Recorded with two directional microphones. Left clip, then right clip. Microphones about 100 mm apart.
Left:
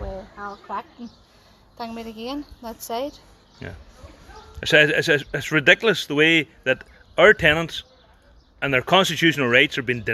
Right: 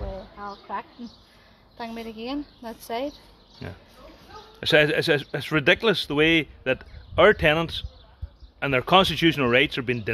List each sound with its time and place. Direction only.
0.4 s a woman's voice: 30° left (ahead or behind)
3.6 s speech: 15° right (ahead or behind)